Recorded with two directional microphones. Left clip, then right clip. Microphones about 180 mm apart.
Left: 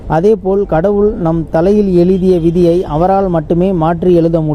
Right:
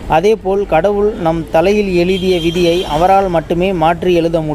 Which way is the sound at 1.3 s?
35° left (ahead or behind).